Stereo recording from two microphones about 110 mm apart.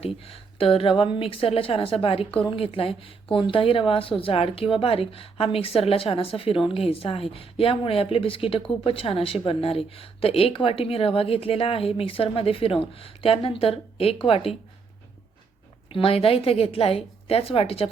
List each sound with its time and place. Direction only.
0.0 s a woman's voice: 60° left (ahead or behind)
15.9 s a woman's voice: 55° left (ahead or behind)